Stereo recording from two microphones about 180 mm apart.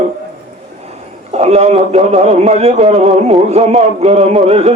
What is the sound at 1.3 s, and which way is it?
A man's voice, 35° right (ahead or behind).